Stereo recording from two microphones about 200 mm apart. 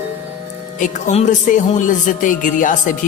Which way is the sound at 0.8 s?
40° left (ahead or behind).